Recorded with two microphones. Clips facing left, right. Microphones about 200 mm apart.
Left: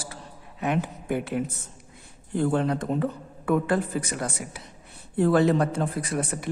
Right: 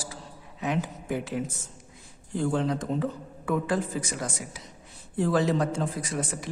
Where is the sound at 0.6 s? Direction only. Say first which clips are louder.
Left 2 dB; 60° left (ahead or behind).